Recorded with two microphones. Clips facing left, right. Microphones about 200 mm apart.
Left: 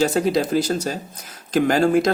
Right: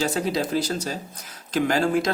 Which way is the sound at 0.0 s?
45° left (ahead or behind).